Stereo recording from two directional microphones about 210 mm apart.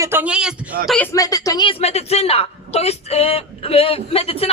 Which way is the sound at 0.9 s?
10° left (ahead or behind).